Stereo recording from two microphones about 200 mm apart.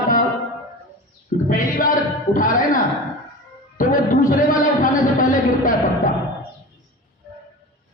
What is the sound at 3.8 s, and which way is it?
Music, 40° left (ahead or behind).